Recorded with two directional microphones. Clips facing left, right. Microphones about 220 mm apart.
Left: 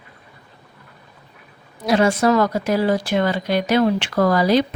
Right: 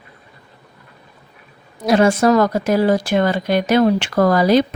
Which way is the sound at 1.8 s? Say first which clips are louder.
Right 3 dB; 45° right (ahead or behind).